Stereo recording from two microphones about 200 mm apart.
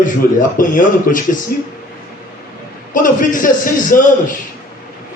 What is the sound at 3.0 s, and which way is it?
A man's voice, 40° left (ahead or behind).